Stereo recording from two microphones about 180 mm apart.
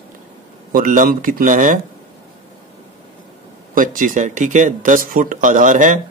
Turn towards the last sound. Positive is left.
turn(degrees=-45)  # may be behind; listen again after turning